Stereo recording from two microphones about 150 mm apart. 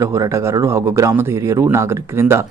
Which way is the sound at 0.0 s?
20° right (ahead or behind).